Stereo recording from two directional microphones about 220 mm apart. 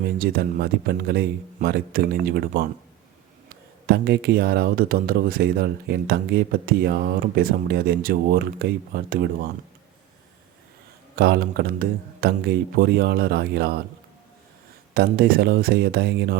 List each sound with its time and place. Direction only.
0.2 s speech: 45° right (ahead or behind)
3.8 s speech: 50° right (ahead or behind)
11.2 s speech: 45° right (ahead or behind)
14.9 s speech: 45° right (ahead or behind)